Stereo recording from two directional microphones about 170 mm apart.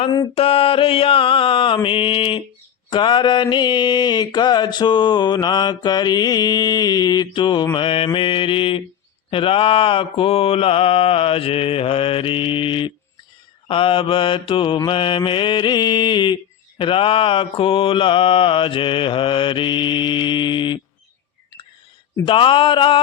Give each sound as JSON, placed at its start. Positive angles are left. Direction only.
{"t": 0.1, "sound": "mantra", "side_deg": 30}
{"t": 22.2, "sound": "mantra", "side_deg": 30}